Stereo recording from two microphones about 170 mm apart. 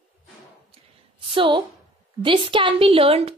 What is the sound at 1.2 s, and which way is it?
A woman's voice, 30° right (ahead or behind).